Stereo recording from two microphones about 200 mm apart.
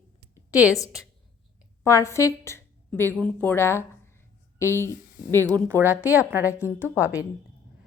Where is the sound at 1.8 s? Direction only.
15° left (ahead or behind).